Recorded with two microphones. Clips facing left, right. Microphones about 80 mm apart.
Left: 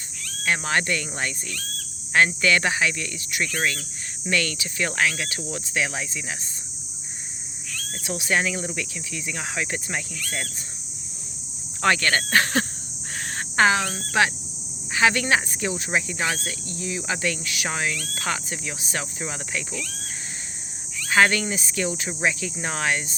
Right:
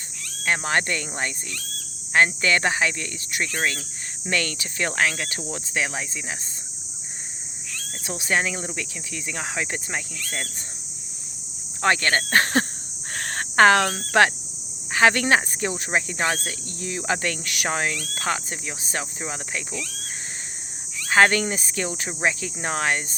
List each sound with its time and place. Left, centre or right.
0.4 s speech: right
3.6 s cricket: right
4.3 s speech: right
8.0 s speech: right
11.8 s speech: right
13.1 s cricket: right
14.9 s speech: right
19.2 s cricket: right
21.1 s speech: right